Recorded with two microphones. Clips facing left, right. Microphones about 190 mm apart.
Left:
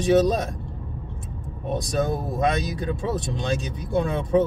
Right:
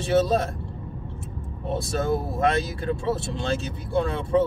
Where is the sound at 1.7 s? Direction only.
15° left (ahead or behind).